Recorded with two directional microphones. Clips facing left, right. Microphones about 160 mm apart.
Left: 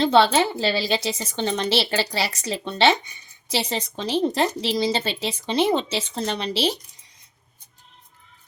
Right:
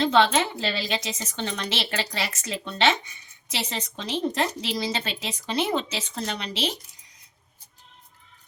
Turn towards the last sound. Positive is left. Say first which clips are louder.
# left 6 dB
turn(degrees=35)  # may be behind; listen again after turning